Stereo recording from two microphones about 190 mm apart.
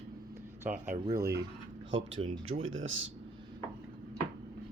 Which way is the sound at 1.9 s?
85° right.